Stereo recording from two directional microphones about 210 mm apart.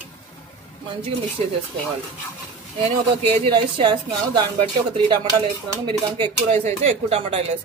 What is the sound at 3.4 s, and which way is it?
Speech, 20° right (ahead or behind).